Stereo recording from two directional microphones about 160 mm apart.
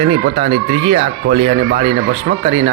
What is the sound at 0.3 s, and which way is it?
Speech, 35° right (ahead or behind).